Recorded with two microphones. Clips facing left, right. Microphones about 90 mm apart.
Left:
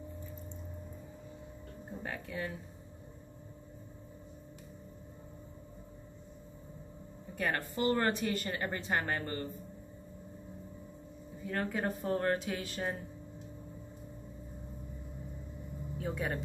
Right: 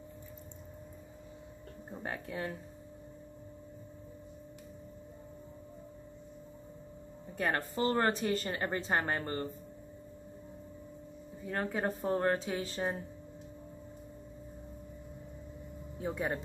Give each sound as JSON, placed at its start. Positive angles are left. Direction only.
{"t": 2.0, "sound": "speech", "side_deg": -30}
{"t": 7.3, "sound": "speech", "side_deg": -30}
{"t": 11.4, "sound": "speech", "side_deg": -30}
{"t": 16.0, "sound": "speech", "side_deg": -25}